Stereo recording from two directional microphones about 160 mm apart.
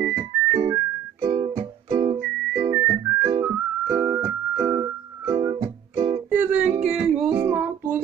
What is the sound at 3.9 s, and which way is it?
Music, 20° right (ahead or behind).